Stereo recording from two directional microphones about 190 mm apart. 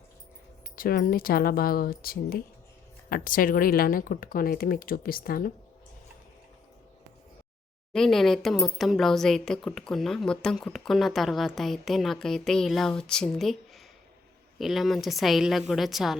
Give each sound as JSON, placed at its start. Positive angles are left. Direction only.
{"t": 0.8, "sound": "speech", "side_deg": 50}
{"t": 7.9, "sound": "speech", "side_deg": 0}